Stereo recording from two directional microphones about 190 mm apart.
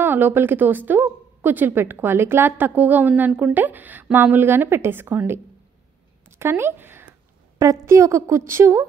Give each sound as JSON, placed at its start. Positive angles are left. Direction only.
{"t": 0.0, "sound": "a woman's voice", "side_deg": -10}